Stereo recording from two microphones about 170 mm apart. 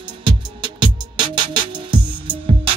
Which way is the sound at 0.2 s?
30° right (ahead or behind).